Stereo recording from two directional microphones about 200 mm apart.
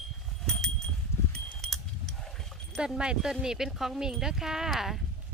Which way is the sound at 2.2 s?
Centre (ahead or behind).